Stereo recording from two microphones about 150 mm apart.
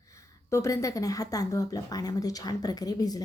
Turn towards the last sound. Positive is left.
turn(degrees=25)  # may be behind; listen again after turning